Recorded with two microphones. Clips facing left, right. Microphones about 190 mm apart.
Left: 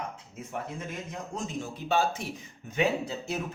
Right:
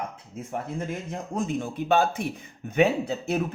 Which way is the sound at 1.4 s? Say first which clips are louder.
Right 8 dB; 55° right (ahead or behind).